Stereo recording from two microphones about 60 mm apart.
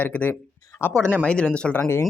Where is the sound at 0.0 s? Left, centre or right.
Left.